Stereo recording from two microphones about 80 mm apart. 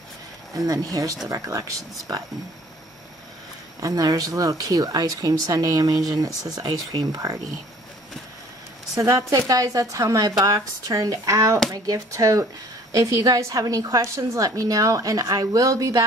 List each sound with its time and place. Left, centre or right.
0.6 s speech: right
3.8 s speech: right
8.9 s speech: right